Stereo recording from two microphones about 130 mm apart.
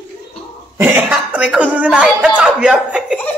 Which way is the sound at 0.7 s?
10° right (ahead or behind).